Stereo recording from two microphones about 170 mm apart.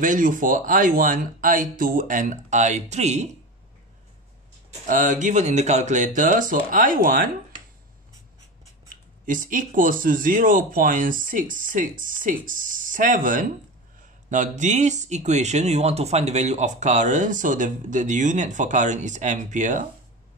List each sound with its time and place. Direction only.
0.0 s speech: 50° right (ahead or behind)
4.8 s speech: 50° right (ahead or behind)
9.2 s speech: 50° right (ahead or behind)